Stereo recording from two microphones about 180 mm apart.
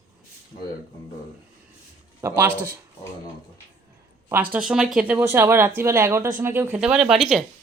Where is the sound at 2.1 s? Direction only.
15° right (ahead or behind).